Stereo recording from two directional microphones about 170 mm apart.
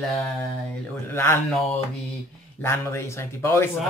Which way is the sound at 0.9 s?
15° left (ahead or behind).